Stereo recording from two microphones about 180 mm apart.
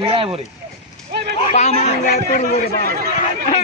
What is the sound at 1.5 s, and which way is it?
Speech, 40° left (ahead or behind).